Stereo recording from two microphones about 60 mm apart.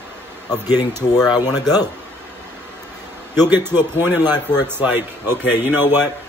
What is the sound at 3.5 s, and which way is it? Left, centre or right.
A man's voice, right.